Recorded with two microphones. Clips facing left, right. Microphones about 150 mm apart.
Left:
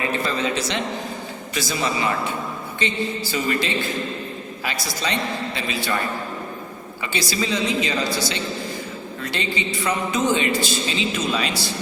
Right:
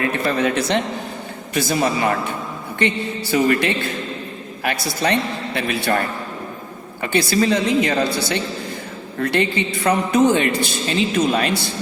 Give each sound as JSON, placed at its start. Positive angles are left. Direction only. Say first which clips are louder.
{"t": 0.0, "sound": "a woman's voice", "louder": "right 4 dB", "side_deg": -60}
{"t": 7.0, "sound": "a woman's voice", "louder": "right 8 dB", "side_deg": -55}